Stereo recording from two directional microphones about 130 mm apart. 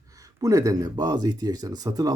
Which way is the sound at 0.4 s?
25° right (ahead or behind).